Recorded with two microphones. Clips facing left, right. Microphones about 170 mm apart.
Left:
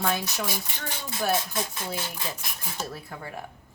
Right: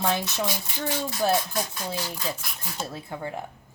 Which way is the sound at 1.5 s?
25° left (ahead or behind).